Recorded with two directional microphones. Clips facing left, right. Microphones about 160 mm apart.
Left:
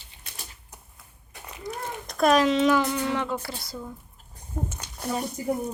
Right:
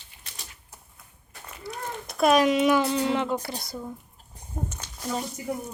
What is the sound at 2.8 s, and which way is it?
Speech, 30° right (ahead or behind).